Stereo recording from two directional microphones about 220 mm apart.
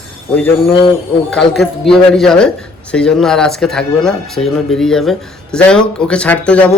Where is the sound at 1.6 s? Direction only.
Centre (ahead or behind).